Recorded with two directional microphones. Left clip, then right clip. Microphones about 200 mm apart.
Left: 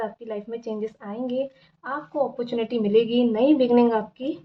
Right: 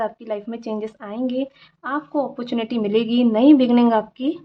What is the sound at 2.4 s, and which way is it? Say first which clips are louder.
A woman's voice: right 1 dB; 50° right (ahead or behind).